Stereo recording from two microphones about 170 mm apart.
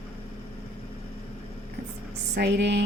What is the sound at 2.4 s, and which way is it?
Speech, 85° right.